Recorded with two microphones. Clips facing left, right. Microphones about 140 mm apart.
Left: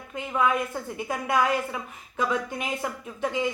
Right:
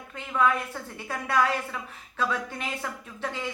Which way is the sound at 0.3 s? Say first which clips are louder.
Even; 15° left (ahead or behind).